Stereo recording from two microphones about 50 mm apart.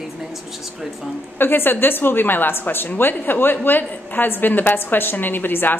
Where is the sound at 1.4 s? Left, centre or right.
Left.